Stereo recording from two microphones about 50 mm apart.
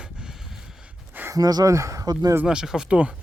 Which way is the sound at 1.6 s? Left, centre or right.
Right.